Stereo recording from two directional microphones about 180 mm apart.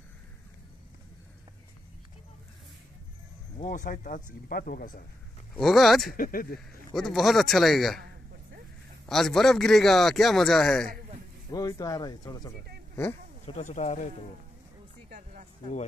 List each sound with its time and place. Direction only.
3.6 s speech: 45° left (ahead or behind)
5.6 s a man's voice: centre (ahead or behind)
6.1 s speech: 50° left (ahead or behind)
6.9 s a man's voice: centre (ahead or behind)
9.0 s a man's voice: centre (ahead or behind)
11.5 s speech: 20° left (ahead or behind)
13.5 s speech: 40° left (ahead or behind)
15.0 s music: 45° right (ahead or behind)